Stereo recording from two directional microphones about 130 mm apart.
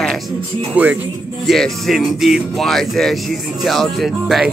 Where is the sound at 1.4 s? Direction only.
Centre (ahead or behind).